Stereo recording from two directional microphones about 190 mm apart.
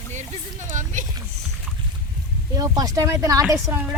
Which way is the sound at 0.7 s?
40° right (ahead or behind).